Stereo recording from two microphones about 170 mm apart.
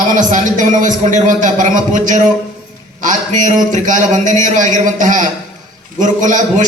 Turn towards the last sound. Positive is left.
turn(degrees=-50)  # may be behind; listen again after turning